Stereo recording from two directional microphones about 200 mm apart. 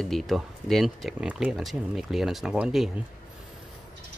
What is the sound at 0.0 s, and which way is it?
A man's voice, centre (ahead or behind).